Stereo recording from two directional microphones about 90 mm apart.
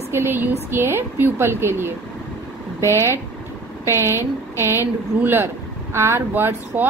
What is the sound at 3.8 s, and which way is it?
A woman's voice, 30° right (ahead or behind).